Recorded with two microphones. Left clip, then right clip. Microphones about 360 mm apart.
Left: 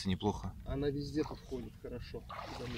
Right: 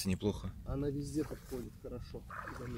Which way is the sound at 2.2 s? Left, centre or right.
Left.